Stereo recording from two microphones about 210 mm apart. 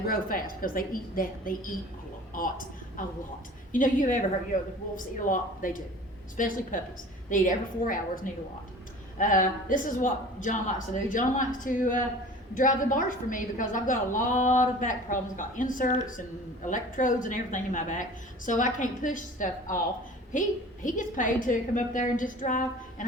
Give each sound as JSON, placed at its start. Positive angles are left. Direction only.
{"t": 0.1, "sound": "a woman's voice", "side_deg": 40}